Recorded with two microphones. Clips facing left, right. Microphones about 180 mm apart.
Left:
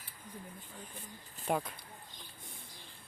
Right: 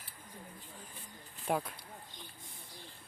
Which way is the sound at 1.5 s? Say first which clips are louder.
Even; centre (ahead or behind).